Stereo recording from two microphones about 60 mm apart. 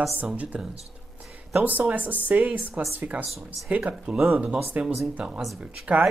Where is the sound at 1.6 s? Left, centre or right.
Right.